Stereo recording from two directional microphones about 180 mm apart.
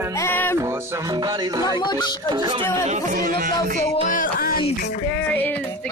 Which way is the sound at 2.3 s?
25° right (ahead or behind).